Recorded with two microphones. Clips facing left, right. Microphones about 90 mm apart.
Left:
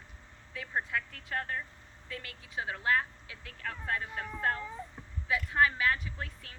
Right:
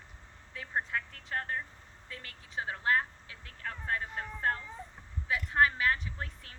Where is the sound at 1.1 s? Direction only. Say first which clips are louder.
Even; 35° right (ahead or behind).